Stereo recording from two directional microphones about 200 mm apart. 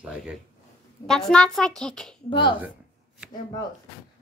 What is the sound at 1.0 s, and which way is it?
Speech, centre (ahead or behind).